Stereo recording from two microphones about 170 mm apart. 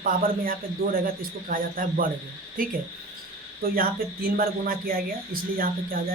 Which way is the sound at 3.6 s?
60° right (ahead or behind).